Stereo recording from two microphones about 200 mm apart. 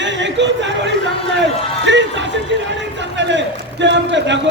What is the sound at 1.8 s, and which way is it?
Speech, 65° right (ahead or behind).